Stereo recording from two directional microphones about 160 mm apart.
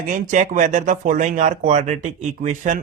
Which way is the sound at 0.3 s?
50° right (ahead or behind).